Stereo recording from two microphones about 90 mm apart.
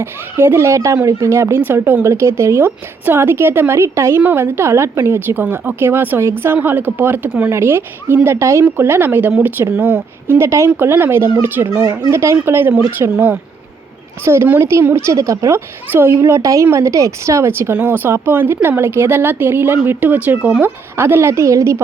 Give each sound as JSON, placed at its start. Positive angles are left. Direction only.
{"t": 0.0, "sound": "a woman's voice", "side_deg": -25}